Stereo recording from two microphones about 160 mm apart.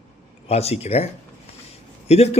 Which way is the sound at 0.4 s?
40° left (ahead or behind).